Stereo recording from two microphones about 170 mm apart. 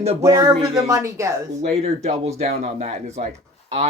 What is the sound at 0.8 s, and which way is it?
Speech, 15° right (ahead or behind).